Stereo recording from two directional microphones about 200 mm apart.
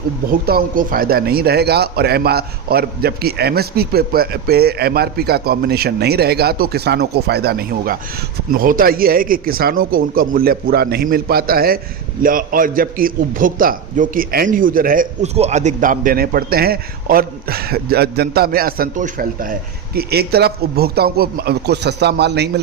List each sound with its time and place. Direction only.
0.3 s a man's voice: 45° right (ahead or behind)